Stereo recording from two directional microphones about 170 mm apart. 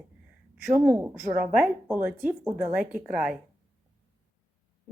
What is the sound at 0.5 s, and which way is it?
A woman's voice, 10° right (ahead or behind).